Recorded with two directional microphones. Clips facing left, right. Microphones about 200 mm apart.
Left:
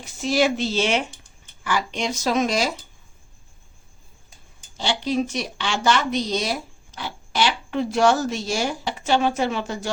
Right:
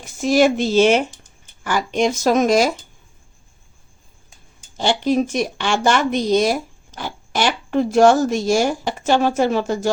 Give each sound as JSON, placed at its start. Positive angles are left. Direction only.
{"t": 0.0, "sound": "speech", "side_deg": -50}
{"t": 4.8, "sound": "speech", "side_deg": -50}